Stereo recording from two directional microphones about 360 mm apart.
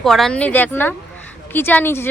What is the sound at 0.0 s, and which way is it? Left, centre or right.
Speech, centre.